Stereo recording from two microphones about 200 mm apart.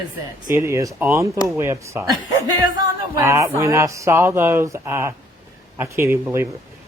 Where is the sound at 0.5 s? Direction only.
15° right (ahead or behind).